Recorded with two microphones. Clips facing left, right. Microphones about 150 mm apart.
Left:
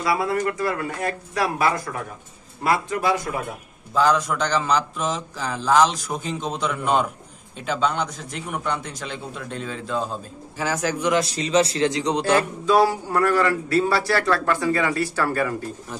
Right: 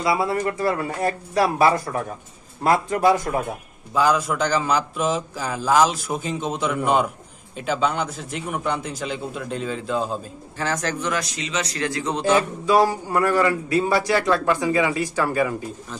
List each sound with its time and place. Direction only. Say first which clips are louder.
0.0 s a man's voice: right 1 dB; 25° right (ahead or behind); by 3.2 s 40° right (ahead or behind)
3.9 s speech: even; 10° right (ahead or behind)
10.6 s a man's voice: left 2 dB; 10° left (ahead or behind)
11.1 s speech: left 7 dB; 35° left (ahead or behind); by 12.3 s 15° left (ahead or behind)
12.3 s speech: right 2 dB; 10° right (ahead or behind)